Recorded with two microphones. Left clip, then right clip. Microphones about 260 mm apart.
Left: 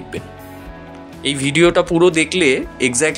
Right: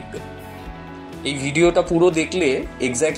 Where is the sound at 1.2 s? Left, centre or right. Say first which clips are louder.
Left 4 dB; left.